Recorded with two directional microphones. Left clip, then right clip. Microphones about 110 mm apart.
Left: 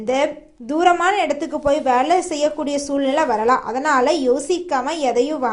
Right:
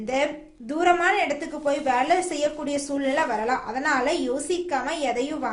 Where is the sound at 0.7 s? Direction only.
45° left (ahead or behind).